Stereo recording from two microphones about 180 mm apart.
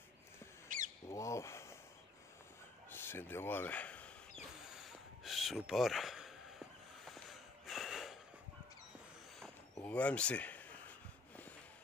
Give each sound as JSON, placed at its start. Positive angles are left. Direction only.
{"t": 0.7, "sound": "bird", "side_deg": -45}
{"t": 1.0, "sound": "a sound", "side_deg": 15}
{"t": 2.9, "sound": "speech", "side_deg": 10}
{"t": 4.6, "sound": "a sound", "side_deg": 0}
{"t": 7.1, "sound": "snort", "side_deg": 0}
{"t": 9.8, "sound": "speech", "side_deg": 10}